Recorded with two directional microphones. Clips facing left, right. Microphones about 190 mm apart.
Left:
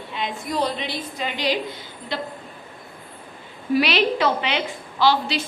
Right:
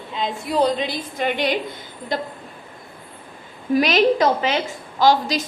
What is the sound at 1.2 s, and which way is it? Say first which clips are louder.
A woman's voice: right 3 dB; 55° right (ahead or behind).